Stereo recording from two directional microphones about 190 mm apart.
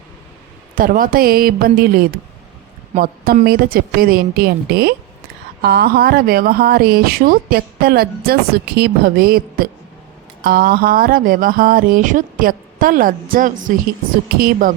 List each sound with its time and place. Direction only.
0.8 s speech: 45° right (ahead or behind)